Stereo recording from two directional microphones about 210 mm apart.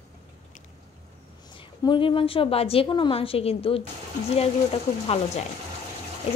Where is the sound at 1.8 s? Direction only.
25° left (ahead or behind).